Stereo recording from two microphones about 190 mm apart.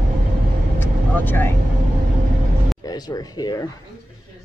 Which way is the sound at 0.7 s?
10° left (ahead or behind).